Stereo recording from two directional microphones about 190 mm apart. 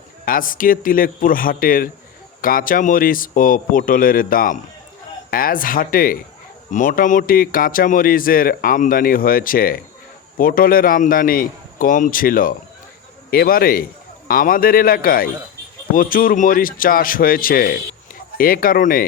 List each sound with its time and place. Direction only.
0.3 s a man's voice: 45° left (ahead or behind)